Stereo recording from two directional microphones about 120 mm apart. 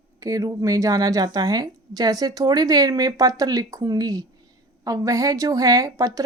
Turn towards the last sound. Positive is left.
turn(degrees=-30)  # may be behind; listen again after turning